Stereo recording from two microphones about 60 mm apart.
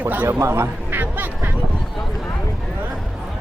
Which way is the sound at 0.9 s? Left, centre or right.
Right.